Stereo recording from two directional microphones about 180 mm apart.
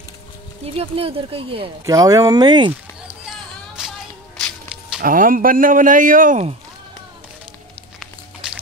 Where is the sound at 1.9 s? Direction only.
20° right (ahead or behind).